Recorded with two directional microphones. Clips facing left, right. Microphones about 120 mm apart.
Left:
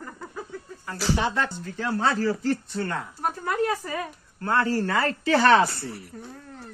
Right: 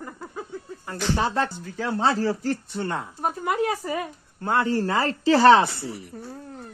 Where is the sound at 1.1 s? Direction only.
35° right (ahead or behind).